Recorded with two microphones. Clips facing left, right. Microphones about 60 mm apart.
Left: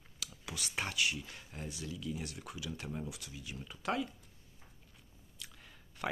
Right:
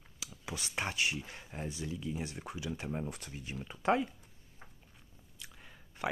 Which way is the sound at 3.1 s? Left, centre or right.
Right.